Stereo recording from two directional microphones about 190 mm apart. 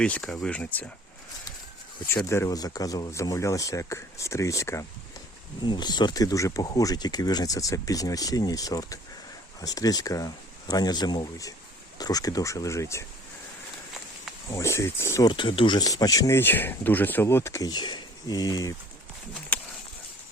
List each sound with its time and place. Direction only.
0.0 s speech: 5° left (ahead or behind)
2.0 s speech: 15° left (ahead or behind)
14.5 s speech: 15° left (ahead or behind)
15.3 s speech: 25° left (ahead or behind)